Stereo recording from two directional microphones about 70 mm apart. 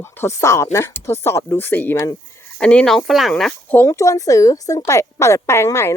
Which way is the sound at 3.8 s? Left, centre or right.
Left.